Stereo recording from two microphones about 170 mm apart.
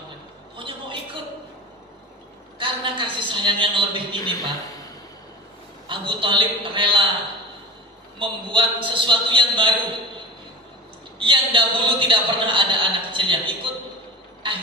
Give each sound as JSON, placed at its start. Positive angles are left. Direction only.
{"t": 0.5, "sound": "a sound", "side_deg": -30}
{"t": 2.6, "sound": "a man's voice", "side_deg": -30}
{"t": 5.9, "sound": "a man's voice", "side_deg": -30}
{"t": 8.2, "sound": "a man's voice", "side_deg": -30}
{"t": 11.2, "sound": "a man's voice", "side_deg": -30}
{"t": 14.4, "sound": "a sound", "side_deg": -30}